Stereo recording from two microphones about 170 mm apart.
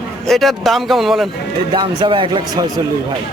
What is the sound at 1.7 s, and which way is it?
Speech, 30° right (ahead or behind).